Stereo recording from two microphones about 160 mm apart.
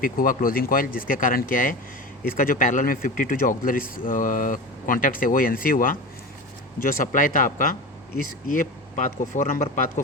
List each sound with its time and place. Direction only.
0.0 s a man's voice: 60° left (ahead or behind)